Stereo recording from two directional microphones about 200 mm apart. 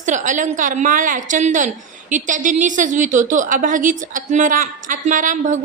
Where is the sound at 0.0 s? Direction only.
40° right (ahead or behind).